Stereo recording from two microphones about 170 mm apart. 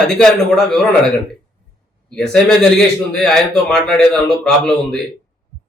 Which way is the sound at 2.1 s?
5° left (ahead or behind).